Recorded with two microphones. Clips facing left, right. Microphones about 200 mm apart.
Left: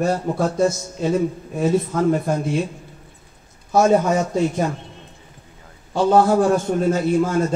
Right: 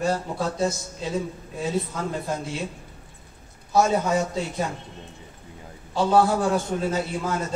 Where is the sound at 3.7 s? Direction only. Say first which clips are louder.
Left 5 dB; 50° left (ahead or behind).